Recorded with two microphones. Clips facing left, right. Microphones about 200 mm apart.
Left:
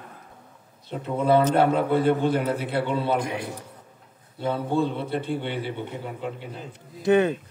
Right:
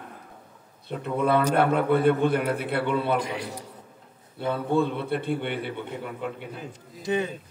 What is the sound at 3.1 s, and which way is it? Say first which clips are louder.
Speech: left 1 dB; 55° left (ahead or behind).